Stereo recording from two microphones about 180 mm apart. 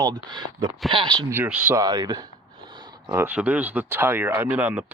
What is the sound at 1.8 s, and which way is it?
Speech, 20° right (ahead or behind).